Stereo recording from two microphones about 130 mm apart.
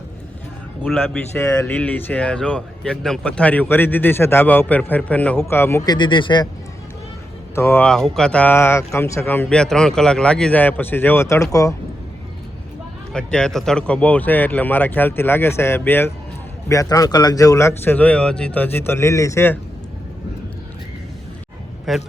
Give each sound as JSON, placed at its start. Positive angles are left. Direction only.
{"t": 1.4, "sound": "speech", "side_deg": 10}
{"t": 5.8, "sound": "speech", "side_deg": 35}
{"t": 7.5, "sound": "speech", "side_deg": 20}
{"t": 7.9, "sound": "speech", "side_deg": 5}
{"t": 13.1, "sound": "speech", "side_deg": 5}
{"t": 21.9, "sound": "a man's voice", "side_deg": 0}